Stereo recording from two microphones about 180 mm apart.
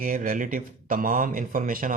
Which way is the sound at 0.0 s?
50° right (ahead or behind).